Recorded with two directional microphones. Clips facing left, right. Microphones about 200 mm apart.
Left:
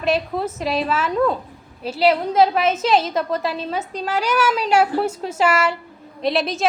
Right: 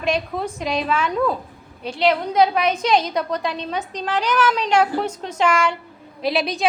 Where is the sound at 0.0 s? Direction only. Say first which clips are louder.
Left 2 dB; 5° left (ahead or behind).